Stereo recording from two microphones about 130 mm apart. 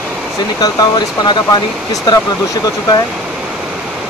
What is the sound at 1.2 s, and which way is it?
Speech, 35° left (ahead or behind).